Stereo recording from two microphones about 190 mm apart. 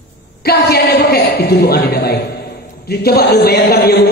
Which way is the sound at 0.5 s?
55° left (ahead or behind).